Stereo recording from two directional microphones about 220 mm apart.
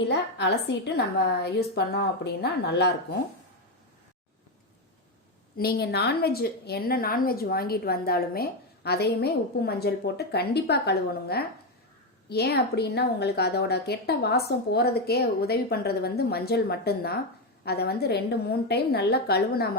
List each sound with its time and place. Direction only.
0.1 s a woman's voice: 50° left (ahead or behind)
5.5 s a woman's voice: 45° left (ahead or behind)